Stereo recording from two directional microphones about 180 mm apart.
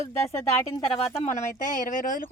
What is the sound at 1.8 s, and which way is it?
Speech, 50° left (ahead or behind).